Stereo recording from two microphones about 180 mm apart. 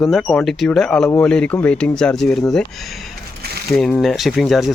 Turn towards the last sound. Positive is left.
turn(degrees=0)  # may be behind; listen again after turning